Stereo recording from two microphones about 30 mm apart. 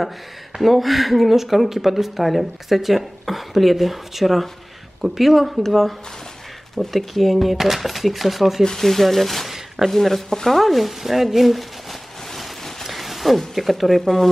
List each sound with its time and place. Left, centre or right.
0.6 s speech: centre
8.6 s speech: centre
10.6 s speech: centre
12.9 s a sound: centre
13.6 s speech: centre